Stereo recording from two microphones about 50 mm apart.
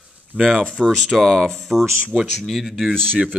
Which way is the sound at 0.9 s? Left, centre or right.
Centre.